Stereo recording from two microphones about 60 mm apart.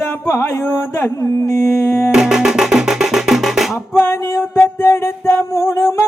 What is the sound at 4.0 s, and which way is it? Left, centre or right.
Music, left.